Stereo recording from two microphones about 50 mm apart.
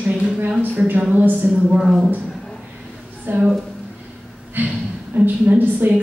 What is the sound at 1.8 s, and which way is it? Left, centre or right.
Speech, centre.